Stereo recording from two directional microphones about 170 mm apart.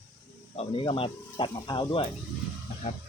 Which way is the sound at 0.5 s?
30° left (ahead or behind).